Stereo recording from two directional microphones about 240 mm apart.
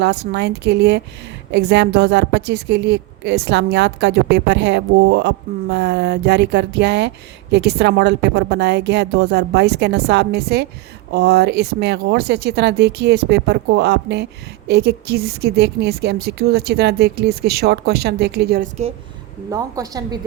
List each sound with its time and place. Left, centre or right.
0.0 s a woman's voice: right
19.5 s a woman's voice: centre